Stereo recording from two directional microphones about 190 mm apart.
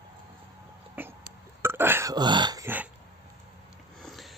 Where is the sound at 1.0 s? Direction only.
10° right (ahead or behind).